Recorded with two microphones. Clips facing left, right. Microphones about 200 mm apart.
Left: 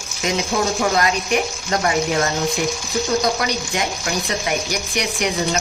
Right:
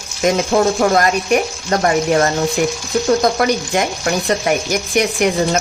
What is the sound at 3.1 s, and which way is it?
Speech, 50° right (ahead or behind).